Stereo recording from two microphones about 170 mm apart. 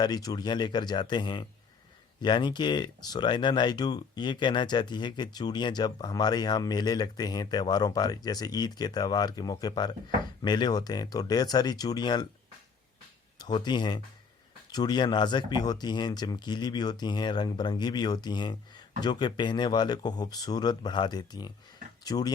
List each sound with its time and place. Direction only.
0.0 s speech: 25° left (ahead or behind)
13.4 s speech: 25° left (ahead or behind)